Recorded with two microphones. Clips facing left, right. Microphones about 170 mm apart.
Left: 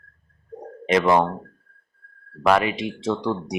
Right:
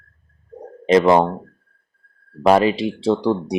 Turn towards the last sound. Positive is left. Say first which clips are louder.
# right 6 dB
turn(degrees=-30)  # may be behind; listen again after turning